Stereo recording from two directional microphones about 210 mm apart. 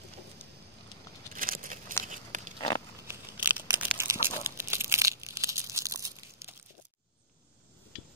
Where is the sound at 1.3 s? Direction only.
40° right (ahead or behind).